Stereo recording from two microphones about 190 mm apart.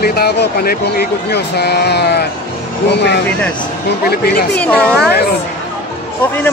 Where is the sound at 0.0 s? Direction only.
55° left (ahead or behind).